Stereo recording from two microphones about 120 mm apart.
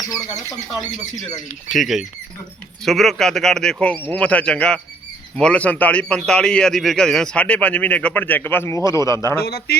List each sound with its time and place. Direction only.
0.0 s speech: 30° left (ahead or behind)
1.7 s a man's voice: centre (ahead or behind); by 9.4 s 25° left (ahead or behind)